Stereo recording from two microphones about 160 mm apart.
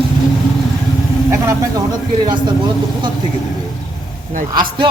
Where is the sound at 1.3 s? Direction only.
20° right (ahead or behind).